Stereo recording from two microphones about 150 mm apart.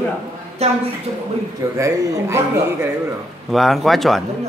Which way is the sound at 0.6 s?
45° right (ahead or behind).